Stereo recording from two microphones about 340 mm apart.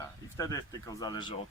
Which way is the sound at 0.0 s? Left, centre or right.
Centre.